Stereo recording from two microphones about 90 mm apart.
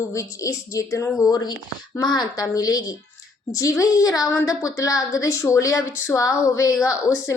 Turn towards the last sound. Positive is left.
turn(degrees=40)  # may be behind; listen again after turning